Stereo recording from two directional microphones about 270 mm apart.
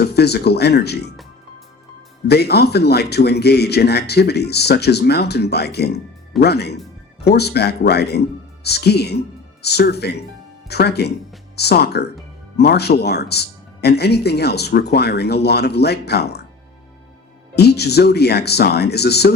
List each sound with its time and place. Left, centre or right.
0.0 s speech: left
2.2 s a man's voice: left
17.5 s a man's voice: left